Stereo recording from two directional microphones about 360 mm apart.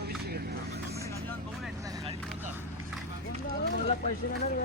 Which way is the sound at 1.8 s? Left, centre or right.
Centre.